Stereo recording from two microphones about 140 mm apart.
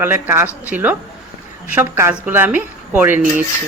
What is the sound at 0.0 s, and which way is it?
Speech, 15° right (ahead or behind).